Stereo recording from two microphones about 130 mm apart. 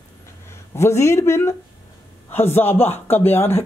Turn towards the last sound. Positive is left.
turn(degrees=15)  # may be behind; listen again after turning